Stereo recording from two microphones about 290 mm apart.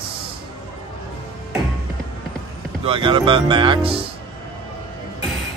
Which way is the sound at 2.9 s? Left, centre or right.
Centre.